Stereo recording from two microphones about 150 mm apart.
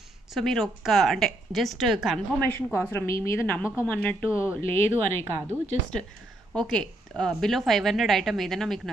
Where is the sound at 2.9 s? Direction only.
20° left (ahead or behind).